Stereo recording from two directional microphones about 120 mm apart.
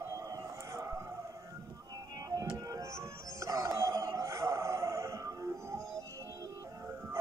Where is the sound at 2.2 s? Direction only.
30° right (ahead or behind).